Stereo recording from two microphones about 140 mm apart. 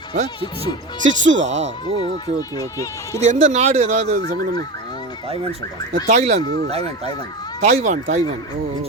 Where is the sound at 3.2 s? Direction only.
55° right (ahead or behind).